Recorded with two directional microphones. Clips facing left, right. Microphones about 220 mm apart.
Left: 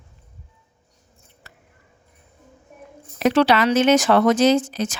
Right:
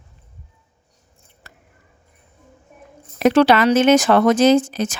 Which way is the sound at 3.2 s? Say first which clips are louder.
Right 3 dB; 50° right (ahead or behind).